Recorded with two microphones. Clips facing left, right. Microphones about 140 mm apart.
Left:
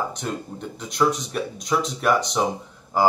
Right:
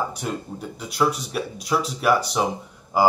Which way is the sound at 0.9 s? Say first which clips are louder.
Left 1 dB; 5° right (ahead or behind).